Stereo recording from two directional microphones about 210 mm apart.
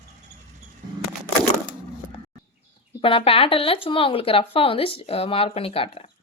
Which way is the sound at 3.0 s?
25° left (ahead or behind).